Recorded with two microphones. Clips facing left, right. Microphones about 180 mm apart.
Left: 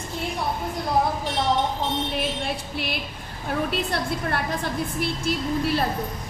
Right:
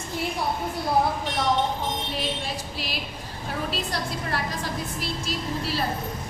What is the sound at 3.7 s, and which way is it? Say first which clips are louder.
A woman's voice: left 4 dB; 55° left (ahead or behind).